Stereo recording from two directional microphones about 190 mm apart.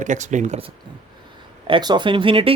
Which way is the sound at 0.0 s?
40° right (ahead or behind).